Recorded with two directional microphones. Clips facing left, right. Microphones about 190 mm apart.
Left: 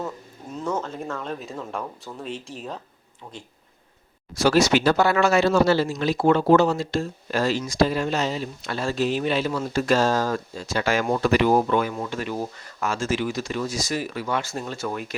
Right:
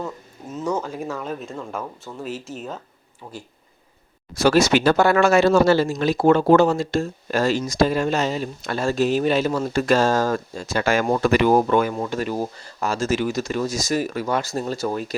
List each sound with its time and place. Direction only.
0.5 s speech: 10° right (ahead or behind)
4.4 s speech: 50° right (ahead or behind); by 15.1 s 35° right (ahead or behind)